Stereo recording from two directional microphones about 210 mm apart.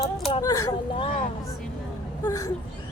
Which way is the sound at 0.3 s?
20° left (ahead or behind).